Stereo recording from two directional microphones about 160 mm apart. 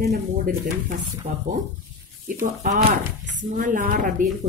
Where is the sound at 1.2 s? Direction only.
50° right (ahead or behind).